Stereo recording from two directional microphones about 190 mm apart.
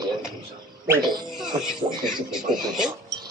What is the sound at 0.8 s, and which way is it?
Speech, 20° right (ahead or behind).